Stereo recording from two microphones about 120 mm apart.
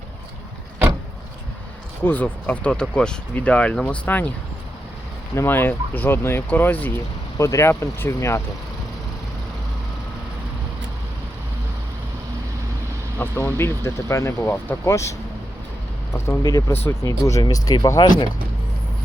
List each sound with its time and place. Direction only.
2.0 s speech: 15° left (ahead or behind)
5.3 s speech: 20° left (ahead or behind)
13.1 s speech: 20° left (ahead or behind)
16.1 s speech: 20° left (ahead or behind)